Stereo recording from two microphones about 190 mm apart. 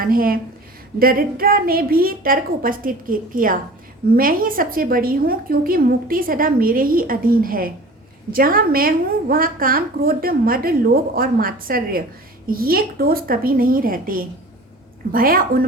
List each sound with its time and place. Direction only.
0.0 s a woman's voice: 50° right (ahead or behind)